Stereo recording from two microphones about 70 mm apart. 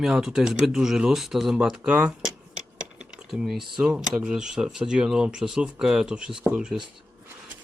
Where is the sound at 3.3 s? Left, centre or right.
Centre.